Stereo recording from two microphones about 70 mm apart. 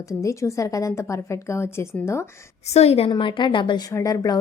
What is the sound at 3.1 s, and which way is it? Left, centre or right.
Speech, left.